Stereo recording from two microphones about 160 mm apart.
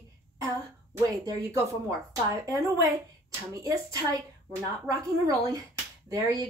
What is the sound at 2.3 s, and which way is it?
A woman's voice, 20° right (ahead or behind).